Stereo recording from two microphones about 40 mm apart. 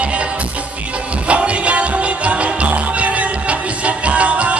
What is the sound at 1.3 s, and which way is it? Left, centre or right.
Music, right.